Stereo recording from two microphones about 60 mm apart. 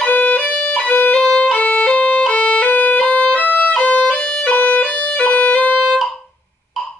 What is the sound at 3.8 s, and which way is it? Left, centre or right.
Music, left.